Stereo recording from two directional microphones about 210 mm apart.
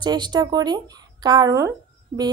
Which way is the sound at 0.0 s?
20° right (ahead or behind).